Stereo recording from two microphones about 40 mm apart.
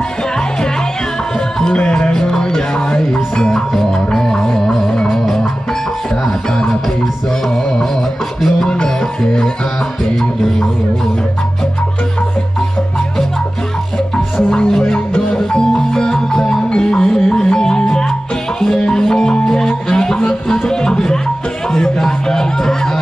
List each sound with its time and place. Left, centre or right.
1.6 s music: left
7.4 s music: centre
8.8 s music: centre
14.5 s music: centre